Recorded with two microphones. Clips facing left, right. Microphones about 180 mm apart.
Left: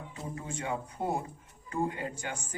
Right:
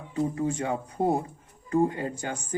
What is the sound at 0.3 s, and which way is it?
Speech, 35° right (ahead or behind).